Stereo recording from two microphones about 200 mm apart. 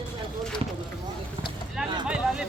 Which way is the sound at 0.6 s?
30° right (ahead or behind).